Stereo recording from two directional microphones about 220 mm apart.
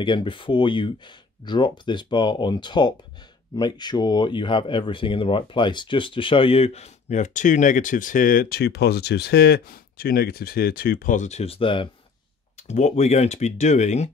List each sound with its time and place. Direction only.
0.0 s speech: 20° left (ahead or behind)